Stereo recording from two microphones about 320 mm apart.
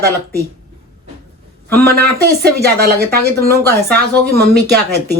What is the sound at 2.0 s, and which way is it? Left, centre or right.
Speech, right.